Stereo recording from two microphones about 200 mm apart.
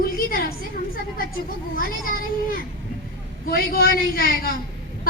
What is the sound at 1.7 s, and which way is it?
Speech, 45° left (ahead or behind).